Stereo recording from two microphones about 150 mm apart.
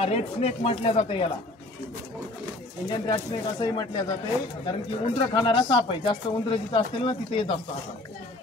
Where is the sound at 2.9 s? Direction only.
30° left (ahead or behind).